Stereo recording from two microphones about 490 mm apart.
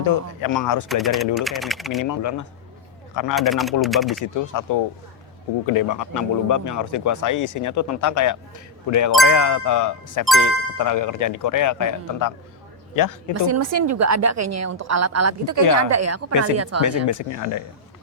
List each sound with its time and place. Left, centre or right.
0.0 s a man's voice: left
0.9 s speech: centre
2.0 s a man's voice: left
3.3 s speech: centre
4.2 s a man's voice: left
13.3 s a woman's voice: right
16.8 s a man's voice: left